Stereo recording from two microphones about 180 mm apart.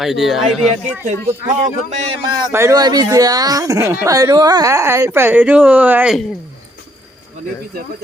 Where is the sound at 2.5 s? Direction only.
15° right (ahead or behind).